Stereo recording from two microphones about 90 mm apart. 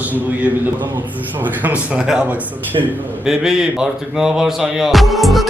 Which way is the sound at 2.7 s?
65° right (ahead or behind).